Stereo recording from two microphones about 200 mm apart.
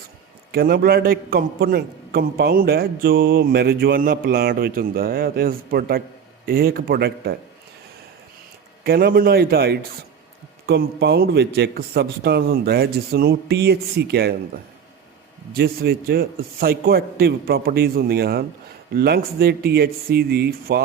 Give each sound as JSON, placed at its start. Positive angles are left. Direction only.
{"t": 0.5, "sound": "a man's voice", "side_deg": -50}
{"t": 8.8, "sound": "a man's voice", "side_deg": -50}
{"t": 15.5, "sound": "a man's voice", "side_deg": -50}